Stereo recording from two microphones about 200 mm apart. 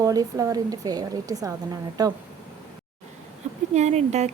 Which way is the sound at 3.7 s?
35° right (ahead or behind).